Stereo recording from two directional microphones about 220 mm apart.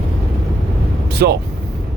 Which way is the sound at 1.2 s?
45° right (ahead or behind).